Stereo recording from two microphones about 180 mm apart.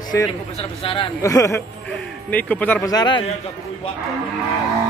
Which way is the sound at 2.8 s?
25° left (ahead or behind).